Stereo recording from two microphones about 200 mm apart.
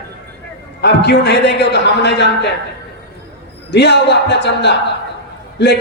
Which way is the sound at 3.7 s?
55° left (ahead or behind).